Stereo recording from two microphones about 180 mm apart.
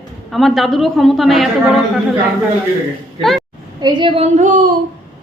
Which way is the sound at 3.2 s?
Centre (ahead or behind).